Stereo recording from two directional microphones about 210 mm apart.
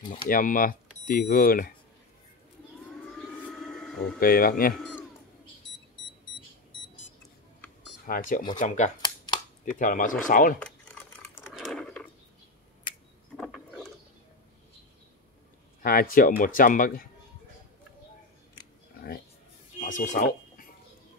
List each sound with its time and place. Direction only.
0.3 s speech: 40° left (ahead or behind)
3.1 s vehicle: centre (ahead or behind)
4.2 s speech: 45° left (ahead or behind)
8.1 s speech: 40° left (ahead or behind)
9.0 s a sound: 20° left (ahead or behind)
9.8 s speech: 40° left (ahead or behind)
11.1 s a sound: 5° left (ahead or behind)
15.8 s speech: 45° left (ahead or behind)
19.8 s a sound: 35° left (ahead or behind)